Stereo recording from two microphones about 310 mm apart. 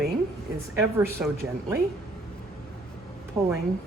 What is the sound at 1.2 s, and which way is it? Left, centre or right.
Speech, centre.